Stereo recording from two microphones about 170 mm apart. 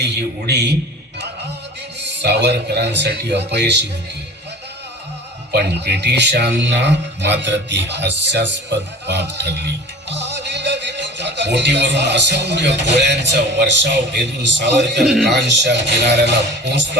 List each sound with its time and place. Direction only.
0.0 s a man's voice: 80° right
2.0 s speech: 80° right
5.5 s speech: 75° right (ahead or behind); by 17.0 s 90° right